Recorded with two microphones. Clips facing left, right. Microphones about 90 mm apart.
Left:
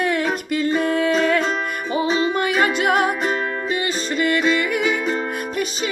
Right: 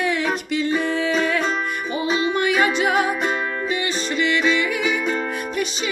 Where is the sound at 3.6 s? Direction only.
40° left (ahead or behind).